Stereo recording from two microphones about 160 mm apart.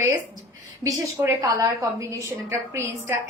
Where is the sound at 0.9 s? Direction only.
20° right (ahead or behind).